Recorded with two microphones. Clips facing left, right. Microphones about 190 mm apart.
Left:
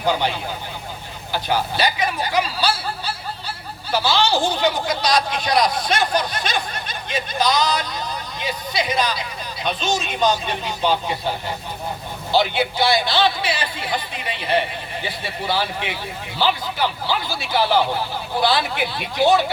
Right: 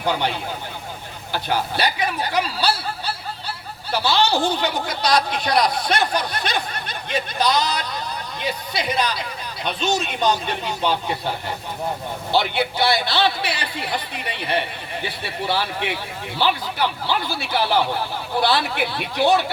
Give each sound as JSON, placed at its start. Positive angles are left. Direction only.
{"t": 0.1, "sound": "speech", "side_deg": -60}
{"t": 12.3, "sound": "speech", "side_deg": -60}